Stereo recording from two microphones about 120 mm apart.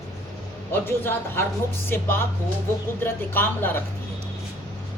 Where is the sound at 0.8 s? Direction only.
20° left (ahead or behind).